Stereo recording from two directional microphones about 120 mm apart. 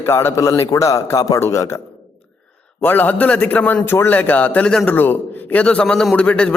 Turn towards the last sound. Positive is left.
turn(degrees=10)  # may be behind; listen again after turning